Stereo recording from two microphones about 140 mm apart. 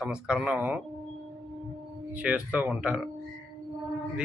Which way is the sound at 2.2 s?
10° right (ahead or behind).